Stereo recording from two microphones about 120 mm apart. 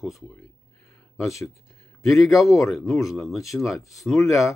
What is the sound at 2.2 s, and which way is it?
Speech, centre (ahead or behind).